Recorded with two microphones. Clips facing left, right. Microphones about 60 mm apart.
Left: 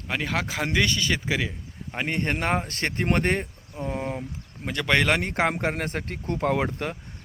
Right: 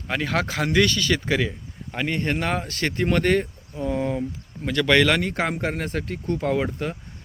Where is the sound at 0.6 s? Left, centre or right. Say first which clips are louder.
Right 4 dB; centre.